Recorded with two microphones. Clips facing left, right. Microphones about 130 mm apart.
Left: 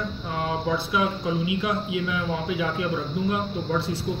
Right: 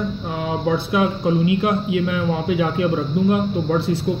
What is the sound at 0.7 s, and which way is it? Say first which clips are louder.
A man's voice: right 8 dB; 55° right (ahead or behind).